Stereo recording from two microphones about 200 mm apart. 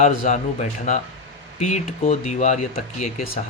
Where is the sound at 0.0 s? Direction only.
35° left (ahead or behind).